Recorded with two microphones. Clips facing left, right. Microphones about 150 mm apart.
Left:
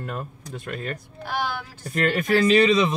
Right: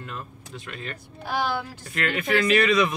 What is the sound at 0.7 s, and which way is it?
Speech, 45° left (ahead or behind).